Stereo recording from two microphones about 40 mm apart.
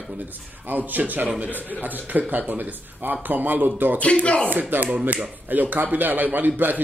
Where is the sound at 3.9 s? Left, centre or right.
Left.